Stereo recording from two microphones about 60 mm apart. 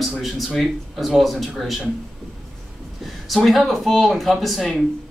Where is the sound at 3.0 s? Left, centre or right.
Centre.